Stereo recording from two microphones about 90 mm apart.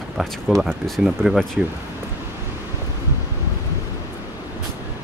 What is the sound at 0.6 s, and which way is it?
Speech, centre (ahead or behind).